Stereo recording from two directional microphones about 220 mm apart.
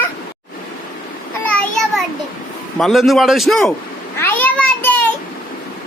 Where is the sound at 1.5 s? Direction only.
5° left (ahead or behind).